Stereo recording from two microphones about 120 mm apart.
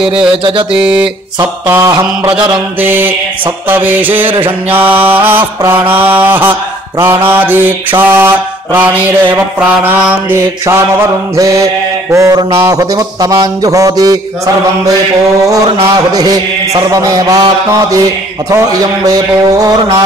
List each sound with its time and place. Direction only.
1.4 s mantra: 25° right (ahead or behind)
2.8 s mantra: 15° right (ahead or behind)
16.1 s speech: 30° right (ahead or behind)
18.5 s speech: 30° right (ahead or behind)